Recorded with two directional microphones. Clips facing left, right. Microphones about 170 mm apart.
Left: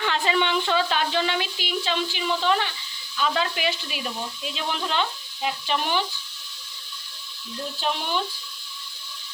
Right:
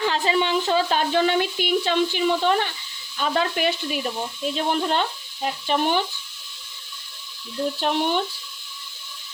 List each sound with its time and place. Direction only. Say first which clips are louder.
0.3 s speech: right 1 dB; 35° right (ahead or behind)
3.2 s stir: right 2 dB; 50° right (ahead or behind)
7.8 s speech: right 3 dB; 55° right (ahead or behind)